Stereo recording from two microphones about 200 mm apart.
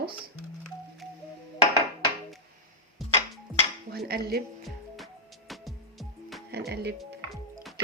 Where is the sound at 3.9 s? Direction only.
50° right (ahead or behind).